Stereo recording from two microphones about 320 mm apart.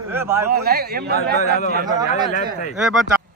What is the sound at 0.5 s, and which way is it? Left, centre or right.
Speech, right.